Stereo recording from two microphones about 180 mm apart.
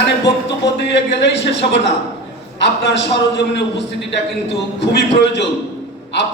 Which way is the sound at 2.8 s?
75° left (ahead or behind).